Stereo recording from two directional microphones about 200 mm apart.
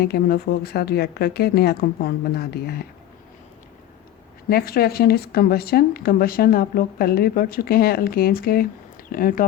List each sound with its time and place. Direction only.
0.0 s speech: 50° left (ahead or behind)
4.4 s speech: 50° left (ahead or behind)